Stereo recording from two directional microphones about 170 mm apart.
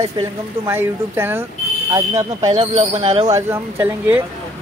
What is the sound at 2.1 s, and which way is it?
Speech, 40° right (ahead or behind).